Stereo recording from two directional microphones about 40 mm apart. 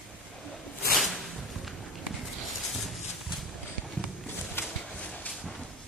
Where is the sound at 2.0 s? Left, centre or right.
Centre.